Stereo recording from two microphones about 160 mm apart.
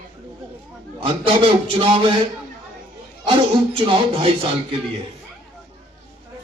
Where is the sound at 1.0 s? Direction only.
35° right (ahead or behind).